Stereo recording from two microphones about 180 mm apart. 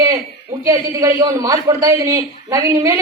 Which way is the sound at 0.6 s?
20° right (ahead or behind).